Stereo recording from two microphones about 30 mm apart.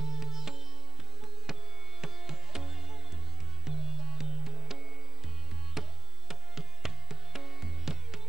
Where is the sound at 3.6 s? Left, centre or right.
Centre.